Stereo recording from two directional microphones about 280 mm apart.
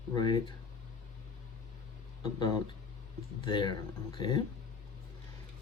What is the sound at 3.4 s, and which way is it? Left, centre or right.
Speech, centre.